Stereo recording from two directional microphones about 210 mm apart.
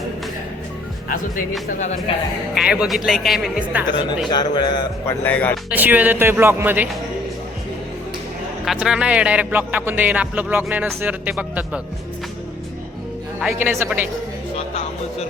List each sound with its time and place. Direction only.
2.1 s a man's voice: 25° left (ahead or behind)
2.6 s speech: 5° right (ahead or behind)
4.5 s a man's voice: 20° left (ahead or behind)
5.2 s speech: 5° left (ahead or behind)
5.7 s speech: 10° right (ahead or behind)
8.6 s speech: centre (ahead or behind)
13.4 s speech: 5° right (ahead or behind)